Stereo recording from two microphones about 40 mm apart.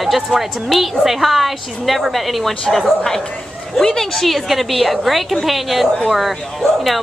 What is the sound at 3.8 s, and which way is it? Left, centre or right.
A woman's voice, centre.